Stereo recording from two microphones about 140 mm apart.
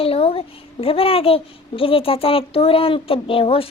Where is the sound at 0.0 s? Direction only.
45° left (ahead or behind).